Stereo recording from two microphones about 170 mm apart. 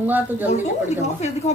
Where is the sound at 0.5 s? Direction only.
40° left (ahead or behind).